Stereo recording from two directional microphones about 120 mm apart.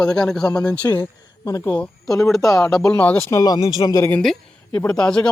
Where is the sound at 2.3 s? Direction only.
Centre (ahead or behind).